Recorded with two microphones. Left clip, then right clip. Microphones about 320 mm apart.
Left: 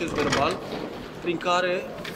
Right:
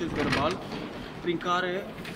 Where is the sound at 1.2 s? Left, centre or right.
Left.